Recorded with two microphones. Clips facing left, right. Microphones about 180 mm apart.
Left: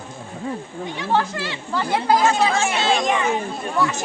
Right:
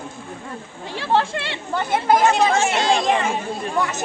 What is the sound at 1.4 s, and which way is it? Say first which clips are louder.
Speech: even; 20° right (ahead or behind).